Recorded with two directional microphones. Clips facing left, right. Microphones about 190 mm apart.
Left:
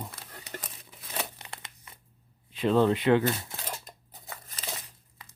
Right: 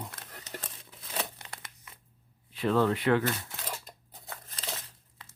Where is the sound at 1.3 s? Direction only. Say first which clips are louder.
Left 1 dB; 20° left (ahead or behind).